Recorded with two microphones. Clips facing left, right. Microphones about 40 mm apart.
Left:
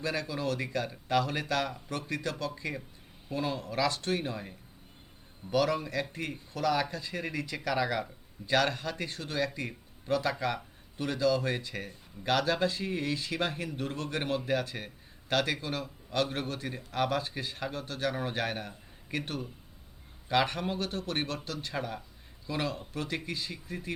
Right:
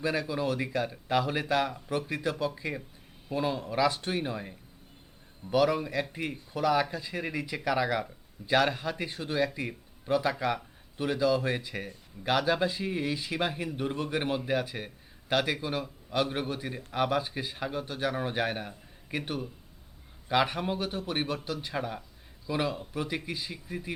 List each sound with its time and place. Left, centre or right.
0.0 s speech: centre